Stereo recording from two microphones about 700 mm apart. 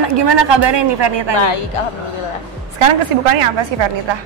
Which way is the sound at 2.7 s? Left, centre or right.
Right.